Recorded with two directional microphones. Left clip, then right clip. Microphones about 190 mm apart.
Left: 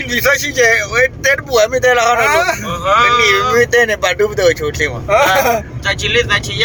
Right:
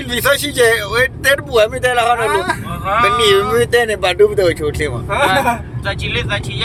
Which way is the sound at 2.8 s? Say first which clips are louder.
Left 3 dB; 5° right (ahead or behind).